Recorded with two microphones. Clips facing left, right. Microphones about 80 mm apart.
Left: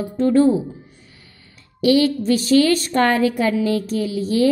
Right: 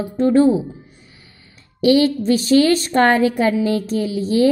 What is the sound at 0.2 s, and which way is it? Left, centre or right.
Speech, right.